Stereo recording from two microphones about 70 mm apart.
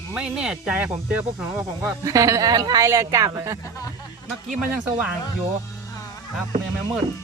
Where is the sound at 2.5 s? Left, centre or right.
Right.